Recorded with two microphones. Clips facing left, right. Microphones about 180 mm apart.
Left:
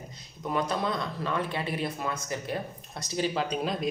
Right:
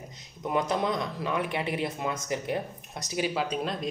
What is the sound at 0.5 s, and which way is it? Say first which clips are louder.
Speech: right 2 dB; 20° right (ahead or behind).